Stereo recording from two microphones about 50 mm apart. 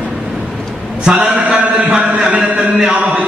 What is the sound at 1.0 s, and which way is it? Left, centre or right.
Mantra, right.